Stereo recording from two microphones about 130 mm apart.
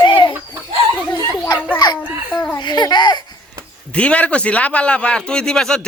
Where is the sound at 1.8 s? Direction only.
35° left (ahead or behind).